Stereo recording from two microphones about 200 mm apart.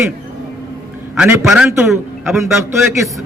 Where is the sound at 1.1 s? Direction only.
5° right (ahead or behind).